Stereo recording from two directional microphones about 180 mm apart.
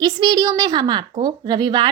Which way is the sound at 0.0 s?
25° right (ahead or behind).